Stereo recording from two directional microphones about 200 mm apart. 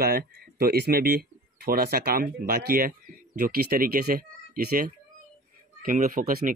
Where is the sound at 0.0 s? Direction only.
50° right (ahead or behind).